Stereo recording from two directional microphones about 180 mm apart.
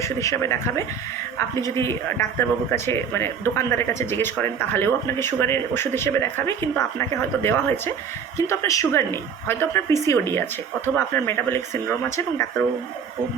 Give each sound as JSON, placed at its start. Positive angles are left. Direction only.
{"t": 0.0, "sound": "a man's voice", "side_deg": 15}